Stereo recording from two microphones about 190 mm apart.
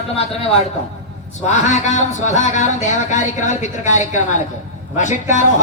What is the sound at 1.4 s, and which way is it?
Speech, 40° left (ahead or behind).